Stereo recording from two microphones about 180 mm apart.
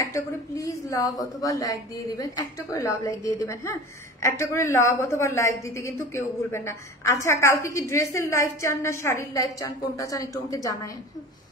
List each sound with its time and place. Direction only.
0.0 s a woman's voice: 20° left (ahead or behind)